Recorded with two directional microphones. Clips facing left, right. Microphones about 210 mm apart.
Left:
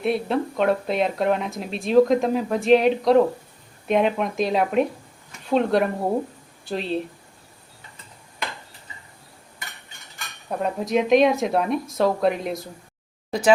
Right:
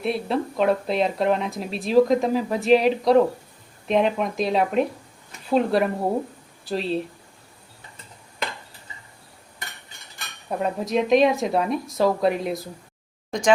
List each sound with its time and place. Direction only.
0.0 s speech: centre (ahead or behind)
10.6 s speech: centre (ahead or behind)